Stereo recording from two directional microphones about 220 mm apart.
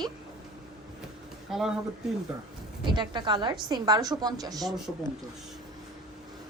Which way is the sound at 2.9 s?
20° right (ahead or behind).